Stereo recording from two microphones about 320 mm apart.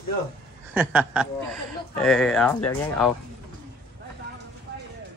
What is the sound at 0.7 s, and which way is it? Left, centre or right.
A man's voice, centre.